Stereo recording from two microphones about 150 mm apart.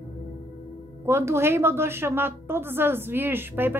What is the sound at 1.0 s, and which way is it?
A woman's voice, 15° right (ahead or behind).